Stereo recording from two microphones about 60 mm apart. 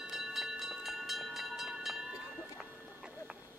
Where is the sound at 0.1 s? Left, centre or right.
Centre.